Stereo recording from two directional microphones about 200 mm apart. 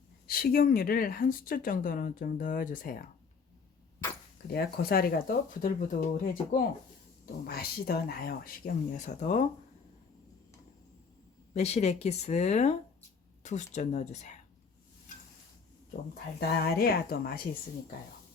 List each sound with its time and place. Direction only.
0.3 s speech: 45° left (ahead or behind)
4.4 s speech: 50° left (ahead or behind)
11.5 s speech: 35° left (ahead or behind)
15.9 s speech: 50° left (ahead or behind)